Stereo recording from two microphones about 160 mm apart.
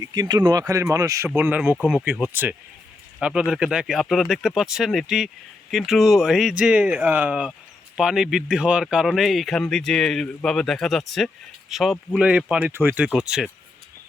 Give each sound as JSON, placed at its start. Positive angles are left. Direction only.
{"t": 0.0, "sound": "speech", "side_deg": -25}